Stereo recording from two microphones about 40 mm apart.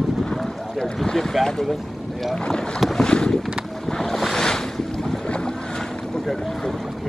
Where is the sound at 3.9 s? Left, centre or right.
Centre.